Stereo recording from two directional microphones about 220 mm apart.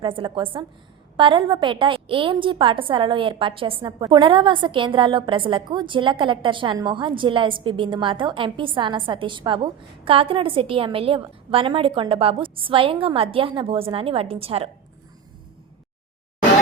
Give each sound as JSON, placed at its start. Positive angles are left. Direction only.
{"t": 0.0, "sound": "a woman's voice", "side_deg": -20}